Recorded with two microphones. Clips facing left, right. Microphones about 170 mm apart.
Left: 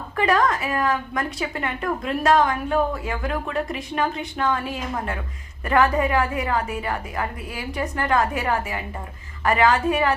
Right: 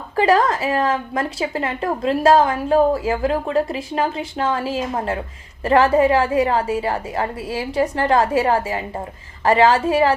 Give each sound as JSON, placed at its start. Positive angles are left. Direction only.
{"t": 0.2, "sound": "a woman's voice", "side_deg": -30}